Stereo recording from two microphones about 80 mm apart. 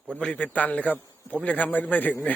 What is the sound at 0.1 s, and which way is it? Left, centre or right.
A man's voice, centre.